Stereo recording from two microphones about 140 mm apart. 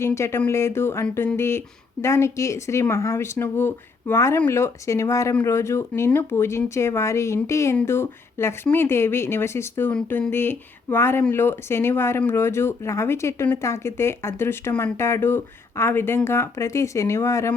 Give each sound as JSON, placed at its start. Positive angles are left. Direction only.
{"t": 0.0, "sound": "speech", "side_deg": 20}